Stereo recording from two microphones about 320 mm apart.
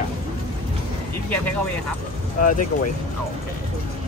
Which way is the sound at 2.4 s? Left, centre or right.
Left.